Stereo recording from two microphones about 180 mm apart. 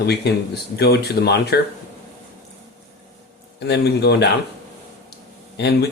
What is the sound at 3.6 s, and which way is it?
Speech, 65° left (ahead or behind).